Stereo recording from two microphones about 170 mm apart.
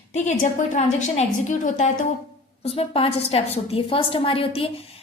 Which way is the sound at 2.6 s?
35° left (ahead or behind).